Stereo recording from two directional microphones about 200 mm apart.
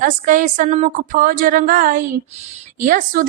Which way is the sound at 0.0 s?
40° right (ahead or behind).